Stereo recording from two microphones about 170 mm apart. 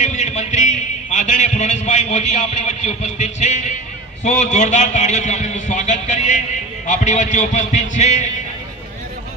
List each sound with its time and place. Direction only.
0.0 s a man's voice: 45° left (ahead or behind)